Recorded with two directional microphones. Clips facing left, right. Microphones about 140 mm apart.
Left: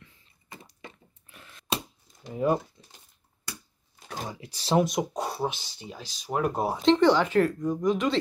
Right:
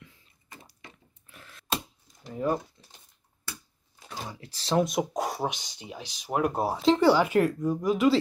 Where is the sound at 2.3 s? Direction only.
10° left (ahead or behind).